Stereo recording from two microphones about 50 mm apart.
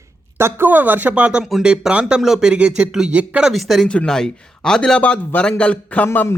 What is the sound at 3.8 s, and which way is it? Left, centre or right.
Speech, centre.